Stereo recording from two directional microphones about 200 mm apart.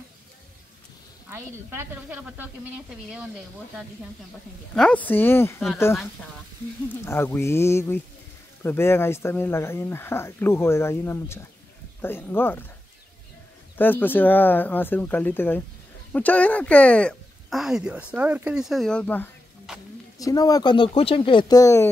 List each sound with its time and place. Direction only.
1.3 s a woman's voice: 10° right (ahead or behind)
4.7 s speech: 5° left (ahead or behind)
7.1 s speech: 10° left (ahead or behind)
13.7 s speech: 10° left (ahead or behind)
20.2 s speech: 15° left (ahead or behind)